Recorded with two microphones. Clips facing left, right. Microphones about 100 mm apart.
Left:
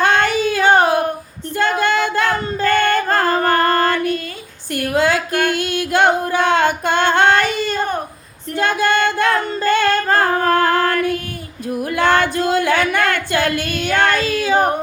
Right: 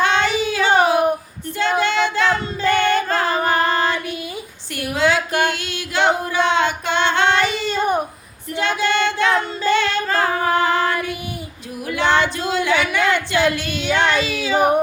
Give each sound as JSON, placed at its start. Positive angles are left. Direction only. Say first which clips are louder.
{"t": 0.0, "sound": "child singing", "louder": "left 2 dB", "side_deg": 50}
{"t": 1.8, "sound": "female singing", "louder": "even", "side_deg": 50}
{"t": 4.7, "sound": "a sound", "louder": "left 2 dB", "side_deg": 50}
{"t": 5.5, "sound": "female singing", "louder": "left 7 dB", "side_deg": 50}
{"t": 11.7, "sound": "a sound", "louder": "left 3 dB", "side_deg": 50}
{"t": 13.6, "sound": "child singing", "louder": "left 2 dB", "side_deg": 50}
{"t": 14.3, "sound": "singing", "louder": "left 2 dB", "side_deg": 50}